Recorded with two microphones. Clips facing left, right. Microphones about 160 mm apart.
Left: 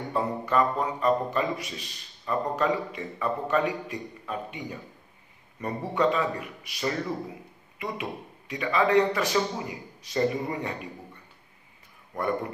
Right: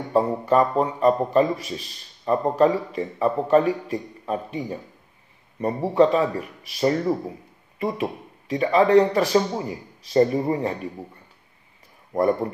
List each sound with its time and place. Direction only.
0.1 s a man's voice: 35° right (ahead or behind)